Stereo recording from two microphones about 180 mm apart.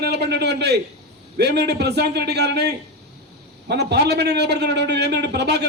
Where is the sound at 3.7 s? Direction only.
65° right (ahead or behind).